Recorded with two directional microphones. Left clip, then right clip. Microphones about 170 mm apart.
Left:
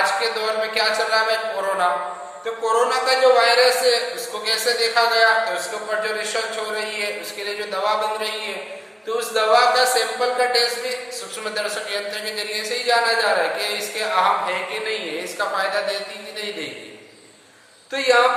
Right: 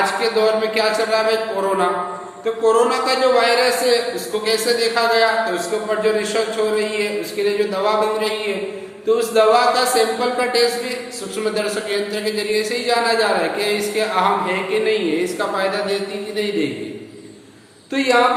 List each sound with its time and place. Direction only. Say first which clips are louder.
0.0 s speech: right 4 dB; 10° right (ahead or behind)
2.4 s speech: right 4 dB; 10° right (ahead or behind)
17.9 s speech: right 1 dB; 10° right (ahead or behind)